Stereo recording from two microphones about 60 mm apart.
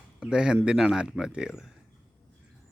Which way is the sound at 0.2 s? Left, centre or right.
Centre.